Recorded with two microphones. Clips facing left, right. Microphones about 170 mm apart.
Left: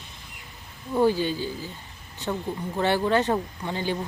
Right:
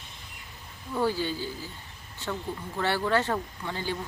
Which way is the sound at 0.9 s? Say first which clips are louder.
Left 6 dB; 15° left (ahead or behind).